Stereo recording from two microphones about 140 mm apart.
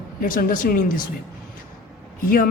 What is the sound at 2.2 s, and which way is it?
Speech, 90° left.